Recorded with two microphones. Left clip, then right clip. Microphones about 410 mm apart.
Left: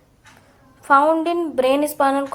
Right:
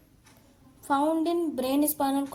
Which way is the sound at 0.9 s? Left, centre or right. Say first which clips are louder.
Left 10 dB; right.